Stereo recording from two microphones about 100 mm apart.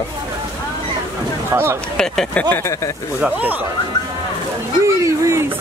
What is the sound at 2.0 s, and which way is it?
Speech, 10° left (ahead or behind).